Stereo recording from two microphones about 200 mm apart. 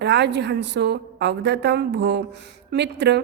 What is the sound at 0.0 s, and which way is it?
A woman's voice, 60° right (ahead or behind).